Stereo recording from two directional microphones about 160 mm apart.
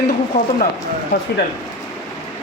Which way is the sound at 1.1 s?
90° left.